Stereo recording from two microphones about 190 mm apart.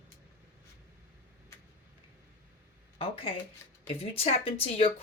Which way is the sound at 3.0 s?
30° left (ahead or behind).